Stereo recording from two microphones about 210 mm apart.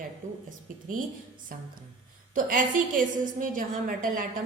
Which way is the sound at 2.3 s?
40° right (ahead or behind).